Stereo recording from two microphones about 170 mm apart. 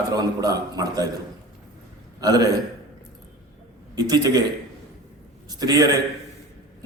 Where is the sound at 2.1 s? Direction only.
20° right (ahead or behind).